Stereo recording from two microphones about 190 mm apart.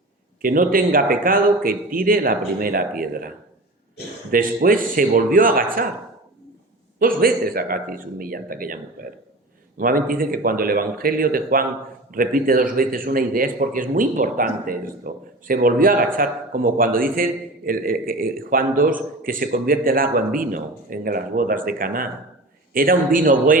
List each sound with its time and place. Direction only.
0.4 s a man's voice: 45° right (ahead or behind)
4.3 s a man's voice: 50° right (ahead or behind)
7.0 s a man's voice: 50° right (ahead or behind)